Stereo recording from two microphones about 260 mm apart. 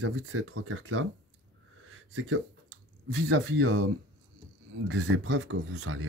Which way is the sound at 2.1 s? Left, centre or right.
Right.